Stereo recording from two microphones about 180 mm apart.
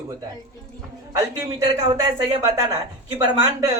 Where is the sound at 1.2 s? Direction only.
15° right (ahead or behind).